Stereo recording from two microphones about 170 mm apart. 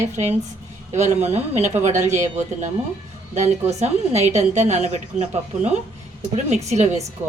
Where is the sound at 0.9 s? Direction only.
45° right (ahead or behind).